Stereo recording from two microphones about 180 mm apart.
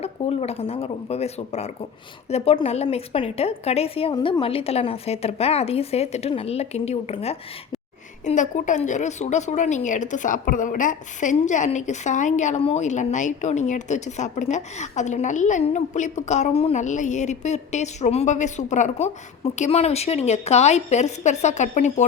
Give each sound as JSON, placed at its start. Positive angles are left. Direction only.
{"t": 0.0, "sound": "a woman's voice", "side_deg": 35}